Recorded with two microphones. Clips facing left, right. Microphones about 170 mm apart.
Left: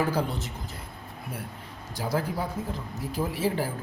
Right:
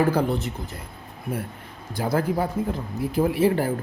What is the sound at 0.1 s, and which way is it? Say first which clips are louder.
A woman's voice: right 6 dB; 55° right (ahead or behind).